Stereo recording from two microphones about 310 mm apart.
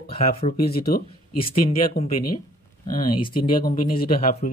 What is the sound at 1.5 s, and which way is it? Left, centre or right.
Speech, left.